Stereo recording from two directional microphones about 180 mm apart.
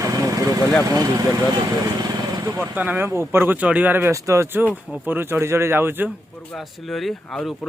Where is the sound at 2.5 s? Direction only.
10° right (ahead or behind).